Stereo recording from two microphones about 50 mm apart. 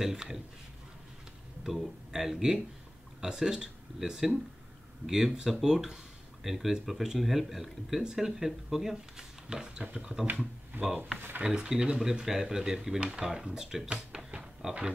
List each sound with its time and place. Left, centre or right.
0.0 s speech: centre
1.6 s speech: centre
10.7 s speech: right
11.4 s speech: centre